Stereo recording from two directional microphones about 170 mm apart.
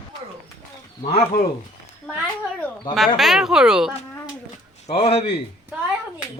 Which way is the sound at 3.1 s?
Centre (ahead or behind).